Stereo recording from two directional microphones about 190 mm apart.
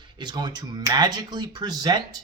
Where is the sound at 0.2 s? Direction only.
20° right (ahead or behind).